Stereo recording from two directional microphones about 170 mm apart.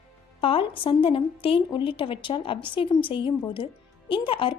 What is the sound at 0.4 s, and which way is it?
A woman's voice, 30° left (ahead or behind).